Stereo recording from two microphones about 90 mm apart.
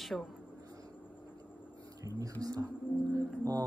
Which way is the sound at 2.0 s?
40° right (ahead or behind).